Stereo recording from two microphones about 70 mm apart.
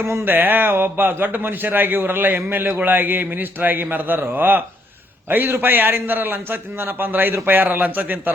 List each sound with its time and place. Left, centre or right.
0.0 s speech: right